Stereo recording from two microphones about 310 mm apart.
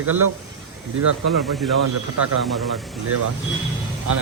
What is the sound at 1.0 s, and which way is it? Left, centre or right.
Speech, right.